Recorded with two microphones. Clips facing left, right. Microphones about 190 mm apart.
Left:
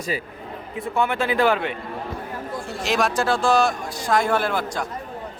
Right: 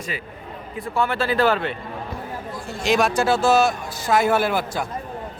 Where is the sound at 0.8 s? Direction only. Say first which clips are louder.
Even; 15° left (ahead or behind).